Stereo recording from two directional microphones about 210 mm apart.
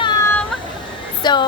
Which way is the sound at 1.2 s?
20° left (ahead or behind).